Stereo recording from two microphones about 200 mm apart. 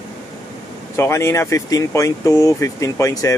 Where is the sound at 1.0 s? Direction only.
15° left (ahead or behind).